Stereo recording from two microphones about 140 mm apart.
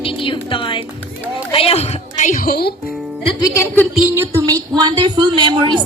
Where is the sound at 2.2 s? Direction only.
80° left.